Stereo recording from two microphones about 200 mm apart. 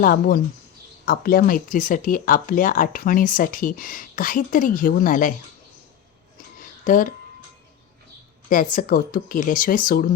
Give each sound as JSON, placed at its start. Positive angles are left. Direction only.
{"t": 0.0, "sound": "speech", "side_deg": 45}
{"t": 6.8, "sound": "speech", "side_deg": 40}
{"t": 8.4, "sound": "speech", "side_deg": 40}